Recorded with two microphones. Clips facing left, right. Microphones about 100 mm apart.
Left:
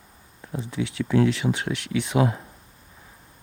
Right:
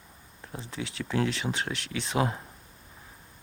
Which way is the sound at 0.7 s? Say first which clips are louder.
Left 8 dB; 35° right (ahead or behind).